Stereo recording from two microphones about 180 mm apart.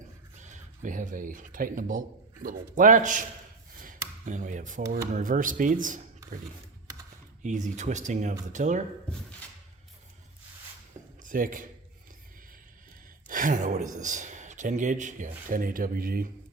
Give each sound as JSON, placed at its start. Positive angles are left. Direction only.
{"t": 0.3, "sound": "speech", "side_deg": -40}
{"t": 4.3, "sound": "speech", "side_deg": -45}
{"t": 7.4, "sound": "speech", "side_deg": -40}
{"t": 11.2, "sound": "speech", "side_deg": -50}
{"t": 13.2, "sound": "speech", "side_deg": -50}